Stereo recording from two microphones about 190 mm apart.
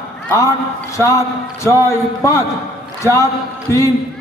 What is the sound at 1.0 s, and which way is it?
A man's voice, 15° left (ahead or behind).